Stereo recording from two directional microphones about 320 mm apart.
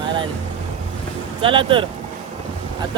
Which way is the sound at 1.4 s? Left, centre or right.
Centre.